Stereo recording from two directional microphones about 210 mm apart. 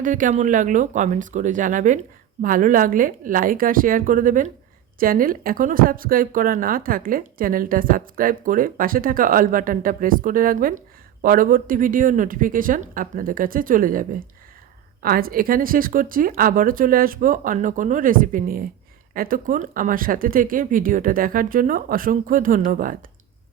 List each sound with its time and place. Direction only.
0.0 s a woman's voice: 40° right (ahead or behind)